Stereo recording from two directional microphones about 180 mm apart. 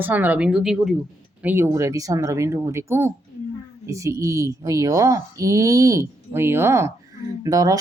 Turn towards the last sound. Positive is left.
turn(degrees=-20)  # may be behind; listen again after turning